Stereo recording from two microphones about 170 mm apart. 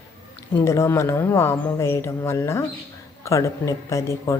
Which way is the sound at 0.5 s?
15° left (ahead or behind).